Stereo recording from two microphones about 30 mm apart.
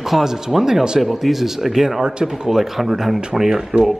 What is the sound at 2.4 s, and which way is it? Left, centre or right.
Speech, centre.